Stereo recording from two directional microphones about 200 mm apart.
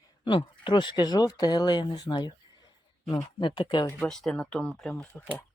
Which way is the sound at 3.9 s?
Centre (ahead or behind).